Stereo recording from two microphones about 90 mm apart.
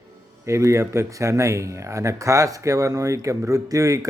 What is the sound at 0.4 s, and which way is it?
Speech, 35° right (ahead or behind).